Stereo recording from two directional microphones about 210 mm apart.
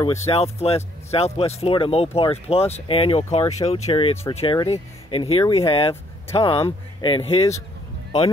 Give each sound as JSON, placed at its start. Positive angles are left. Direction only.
{"t": 0.0, "sound": "speech", "side_deg": 15}
{"t": 0.3, "sound": "speech", "side_deg": 30}